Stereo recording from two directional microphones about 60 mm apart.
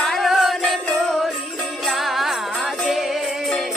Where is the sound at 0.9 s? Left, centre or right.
Centre.